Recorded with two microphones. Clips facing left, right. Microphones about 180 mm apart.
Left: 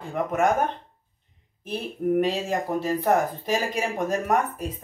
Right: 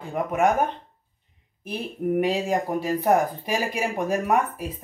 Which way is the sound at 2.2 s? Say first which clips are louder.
Right 4 dB; 15° right (ahead or behind).